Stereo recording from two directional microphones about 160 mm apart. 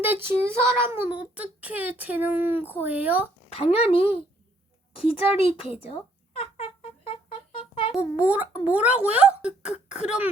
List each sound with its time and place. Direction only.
0.0 s a child's voice: 15° right (ahead or behind)
3.5 s a woman's voice: 40° left (ahead or behind)
5.4 s a woman's voice: 35° left (ahead or behind)
7.1 s music: 35° left (ahead or behind)
7.9 s a child's voice: 10° right (ahead or behind)